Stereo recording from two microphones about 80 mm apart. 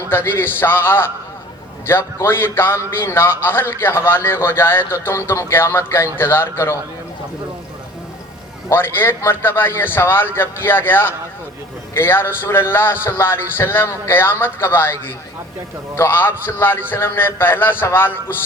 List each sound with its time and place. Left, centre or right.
0.1 s a man's voice: left
8.7 s a man's voice: left